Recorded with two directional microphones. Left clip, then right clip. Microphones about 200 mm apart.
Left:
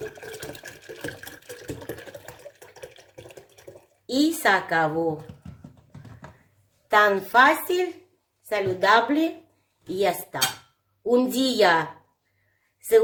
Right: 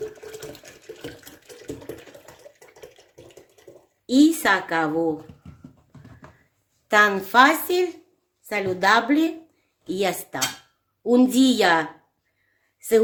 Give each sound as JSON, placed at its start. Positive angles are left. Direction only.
{"t": 2.8, "sound": "a sound", "side_deg": 5}
{"t": 4.0, "sound": "a woman's voice", "side_deg": -40}
{"t": 6.9, "sound": "speech", "side_deg": -45}
{"t": 8.4, "sound": "a woman's voice", "side_deg": -35}